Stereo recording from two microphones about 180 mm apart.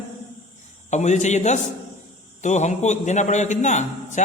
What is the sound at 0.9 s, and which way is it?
A man's voice, 40° left (ahead or behind).